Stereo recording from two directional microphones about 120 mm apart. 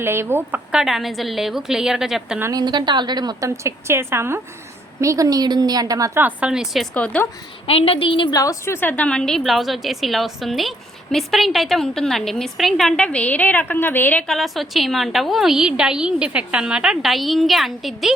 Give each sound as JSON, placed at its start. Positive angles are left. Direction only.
{"t": 0.0, "sound": "a woman's voice", "side_deg": -20}
{"t": 2.4, "sound": "a woman's voice", "side_deg": -30}
{"t": 6.1, "sound": "speech", "side_deg": -10}
{"t": 6.9, "sound": "a woman's voice", "side_deg": 10}
{"t": 7.7, "sound": "a woman's voice", "side_deg": 55}
{"t": 8.3, "sound": "a woman's voice", "side_deg": 25}
{"t": 14.3, "sound": "a woman's voice", "side_deg": 0}